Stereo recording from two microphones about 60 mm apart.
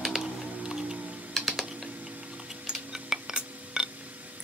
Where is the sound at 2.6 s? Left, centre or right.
Centre.